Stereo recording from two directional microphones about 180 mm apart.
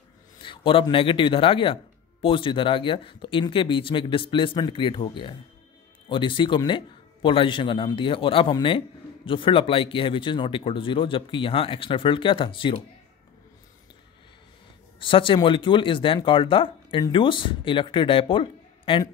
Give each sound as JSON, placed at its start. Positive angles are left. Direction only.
{"t": 0.4, "sound": "speech", "side_deg": 30}
{"t": 15.0, "sound": "speech", "side_deg": 30}